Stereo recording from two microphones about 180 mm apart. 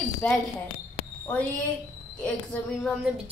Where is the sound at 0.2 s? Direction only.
10° left (ahead or behind).